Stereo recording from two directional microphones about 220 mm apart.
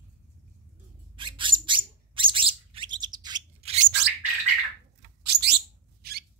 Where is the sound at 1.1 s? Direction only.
20° right (ahead or behind).